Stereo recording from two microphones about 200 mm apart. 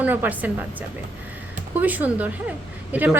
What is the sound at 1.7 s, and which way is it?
A woman's voice, 10° right (ahead or behind).